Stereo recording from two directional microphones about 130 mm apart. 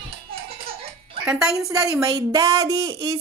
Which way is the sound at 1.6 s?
25° right (ahead or behind).